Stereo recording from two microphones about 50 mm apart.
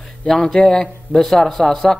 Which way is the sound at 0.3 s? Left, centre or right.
Centre.